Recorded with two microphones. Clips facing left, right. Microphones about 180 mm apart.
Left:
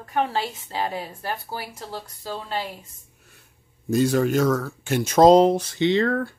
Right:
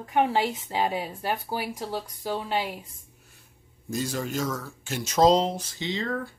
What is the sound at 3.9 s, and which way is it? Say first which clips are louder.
Speech: left 10 dB; 65° left (ahead or behind).